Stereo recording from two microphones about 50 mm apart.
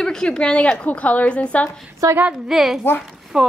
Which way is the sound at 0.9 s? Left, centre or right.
Left.